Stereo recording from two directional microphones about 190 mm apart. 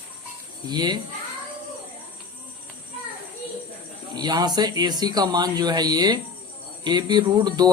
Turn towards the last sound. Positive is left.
turn(degrees=-20)  # may be behind; listen again after turning